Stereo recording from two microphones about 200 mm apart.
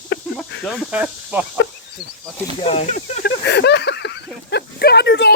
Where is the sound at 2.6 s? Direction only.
30° left (ahead or behind).